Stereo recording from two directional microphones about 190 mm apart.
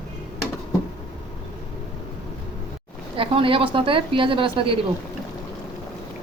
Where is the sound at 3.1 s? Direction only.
30° right (ahead or behind).